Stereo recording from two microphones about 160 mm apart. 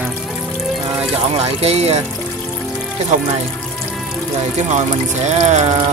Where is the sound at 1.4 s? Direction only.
40° right (ahead or behind).